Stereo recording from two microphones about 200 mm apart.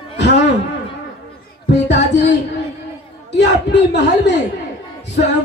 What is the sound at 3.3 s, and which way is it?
Speech, 60° left (ahead or behind).